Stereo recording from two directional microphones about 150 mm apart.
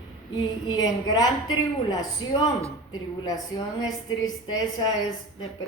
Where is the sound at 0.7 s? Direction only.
25° left (ahead or behind).